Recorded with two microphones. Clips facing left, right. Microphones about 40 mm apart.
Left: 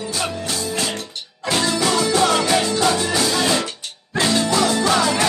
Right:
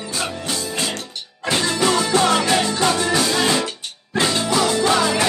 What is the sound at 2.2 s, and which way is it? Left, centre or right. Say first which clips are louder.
Music: even; centre.